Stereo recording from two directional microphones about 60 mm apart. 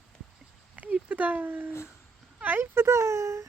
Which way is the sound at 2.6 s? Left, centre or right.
Right.